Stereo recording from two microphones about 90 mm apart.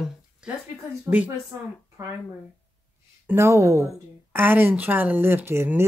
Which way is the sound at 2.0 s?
35° right (ahead or behind).